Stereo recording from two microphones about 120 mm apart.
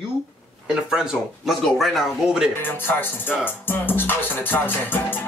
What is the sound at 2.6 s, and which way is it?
Music, 15° left (ahead or behind).